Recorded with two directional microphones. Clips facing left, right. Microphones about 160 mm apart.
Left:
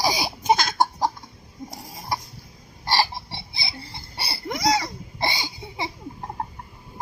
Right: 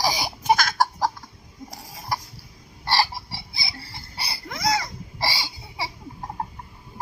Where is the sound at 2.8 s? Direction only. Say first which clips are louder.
Even; 20° left (ahead or behind).